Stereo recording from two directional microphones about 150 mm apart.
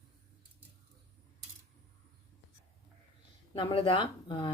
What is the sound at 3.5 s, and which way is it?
Speech, 35° left (ahead or behind).